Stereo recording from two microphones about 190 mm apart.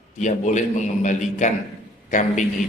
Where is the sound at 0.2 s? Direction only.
40° left (ahead or behind).